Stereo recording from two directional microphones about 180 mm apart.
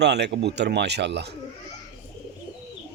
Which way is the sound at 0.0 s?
70° right (ahead or behind).